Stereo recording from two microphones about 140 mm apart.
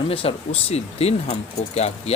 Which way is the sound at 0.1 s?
45° left (ahead or behind).